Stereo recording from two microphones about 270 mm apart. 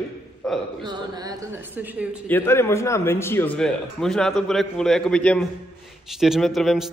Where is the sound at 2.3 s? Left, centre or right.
Centre.